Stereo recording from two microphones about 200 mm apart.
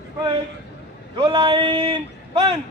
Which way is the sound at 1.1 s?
25° right (ahead or behind).